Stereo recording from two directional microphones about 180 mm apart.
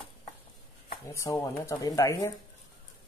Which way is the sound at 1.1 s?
15° left (ahead or behind).